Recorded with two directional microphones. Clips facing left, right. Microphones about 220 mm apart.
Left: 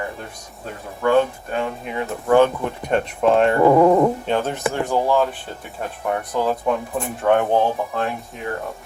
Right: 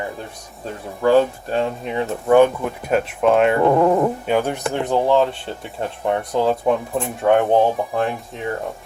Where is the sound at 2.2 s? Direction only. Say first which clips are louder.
Right 2 dB; 15° right (ahead or behind).